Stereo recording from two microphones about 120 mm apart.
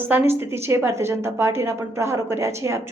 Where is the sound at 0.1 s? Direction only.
20° right (ahead or behind).